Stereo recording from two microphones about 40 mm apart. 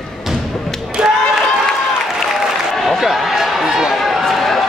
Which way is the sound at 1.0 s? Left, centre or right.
Centre.